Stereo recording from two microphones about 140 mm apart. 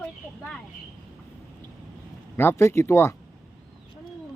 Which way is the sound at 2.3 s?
15° left (ahead or behind).